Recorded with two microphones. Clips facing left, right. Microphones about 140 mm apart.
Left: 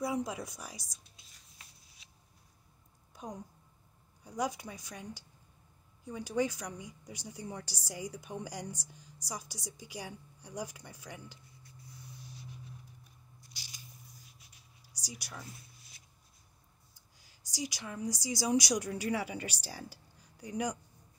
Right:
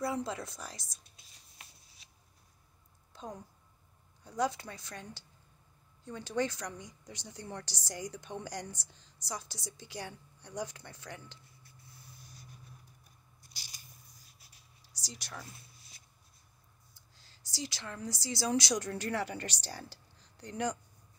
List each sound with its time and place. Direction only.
0.0 s speech: 15° left (ahead or behind)
3.1 s a woman's voice: 15° left (ahead or behind)
12.3 s writing: 45° right (ahead or behind)
13.6 s scissors: 45° right (ahead or behind)
14.9 s a sound: 10° left (ahead or behind)
17.2 s a woman's voice: 15° left (ahead or behind)